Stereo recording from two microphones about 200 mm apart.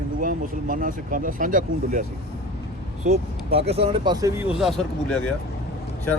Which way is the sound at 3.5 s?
30° right (ahead or behind).